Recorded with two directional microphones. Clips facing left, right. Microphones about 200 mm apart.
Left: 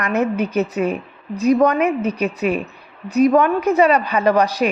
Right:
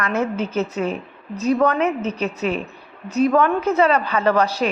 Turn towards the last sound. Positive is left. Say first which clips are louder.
# left 2 dB
turn(degrees=15)  # may be behind; listen again after turning